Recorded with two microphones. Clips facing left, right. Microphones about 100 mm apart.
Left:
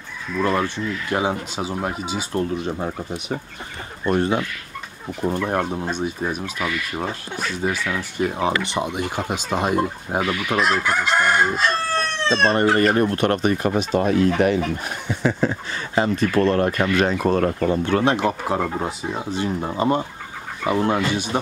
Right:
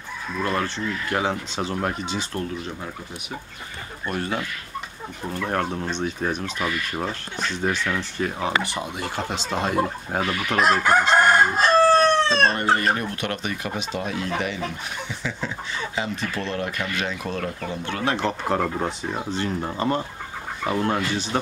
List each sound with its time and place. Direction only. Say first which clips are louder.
0.5 s speech: left 3 dB; 15° left (ahead or behind)
2.3 s speech: left 6 dB; 25° left (ahead or behind)
5.5 s speech: left 2 dB; 15° left (ahead or behind)
10.5 s chicken: right 3 dB; 45° right (ahead or behind)
12.4 s speech: left 3 dB; 35° left (ahead or behind); by 17.9 s 50° left (ahead or behind)
18.0 s speech: left 4 dB; 10° left (ahead or behind)